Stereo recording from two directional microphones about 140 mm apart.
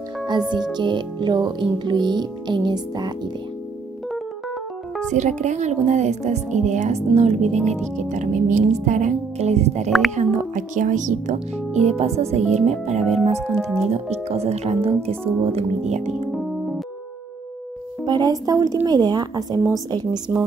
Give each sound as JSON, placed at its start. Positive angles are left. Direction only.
{"t": 0.3, "sound": "music", "side_deg": -30}
{"t": 5.1, "sound": "speech", "side_deg": -60}
{"t": 9.8, "sound": "speech", "side_deg": 0}
{"t": 10.1, "sound": "speech", "side_deg": -60}
{"t": 11.9, "sound": "speech", "side_deg": -50}
{"t": 13.6, "sound": "speech", "side_deg": 0}
{"t": 14.1, "sound": "speech", "side_deg": -50}
{"t": 18.0, "sound": "a woman's voice", "side_deg": -30}